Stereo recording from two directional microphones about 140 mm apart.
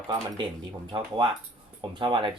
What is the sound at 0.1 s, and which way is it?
Speech, 25° right (ahead or behind).